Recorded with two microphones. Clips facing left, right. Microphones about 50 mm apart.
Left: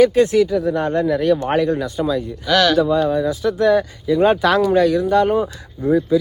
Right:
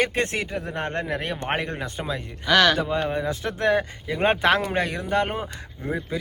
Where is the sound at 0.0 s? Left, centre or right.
Right.